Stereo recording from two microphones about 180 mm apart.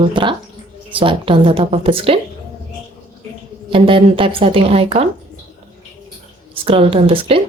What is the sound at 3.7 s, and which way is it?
Speech, 30° right (ahead or behind).